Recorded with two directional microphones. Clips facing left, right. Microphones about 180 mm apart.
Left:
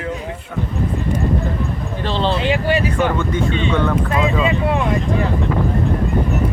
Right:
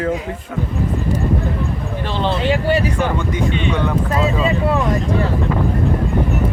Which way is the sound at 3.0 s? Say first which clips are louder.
Left 1 dB; 15° right (ahead or behind).